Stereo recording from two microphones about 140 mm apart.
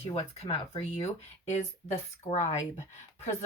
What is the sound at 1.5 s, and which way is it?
Speech, 55° left (ahead or behind).